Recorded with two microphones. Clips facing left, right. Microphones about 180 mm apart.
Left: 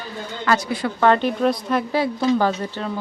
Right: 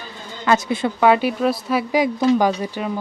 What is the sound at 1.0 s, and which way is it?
Speech, 10° right (ahead or behind).